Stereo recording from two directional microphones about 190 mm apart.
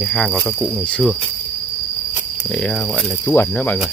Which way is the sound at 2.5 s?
5° left (ahead or behind).